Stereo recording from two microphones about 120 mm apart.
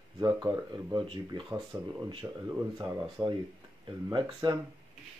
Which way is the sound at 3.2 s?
20° right (ahead or behind).